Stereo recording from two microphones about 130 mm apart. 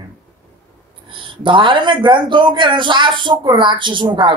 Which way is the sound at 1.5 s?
40° right (ahead or behind).